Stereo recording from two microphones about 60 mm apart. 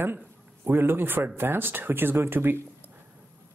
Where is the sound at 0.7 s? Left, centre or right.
Right.